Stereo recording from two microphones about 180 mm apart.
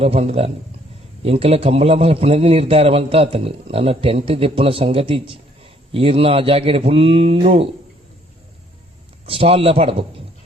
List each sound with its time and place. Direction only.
0.0 s a man's voice: 35° right (ahead or behind)
9.2 s a man's voice: 30° right (ahead or behind)